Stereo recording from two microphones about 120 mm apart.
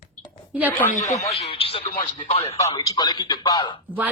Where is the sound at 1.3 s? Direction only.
55° left (ahead or behind).